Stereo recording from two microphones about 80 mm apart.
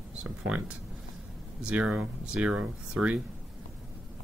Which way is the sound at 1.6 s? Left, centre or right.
Centre.